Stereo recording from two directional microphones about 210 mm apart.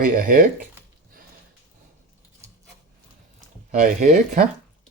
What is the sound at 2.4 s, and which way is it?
Wood, 15° right (ahead or behind).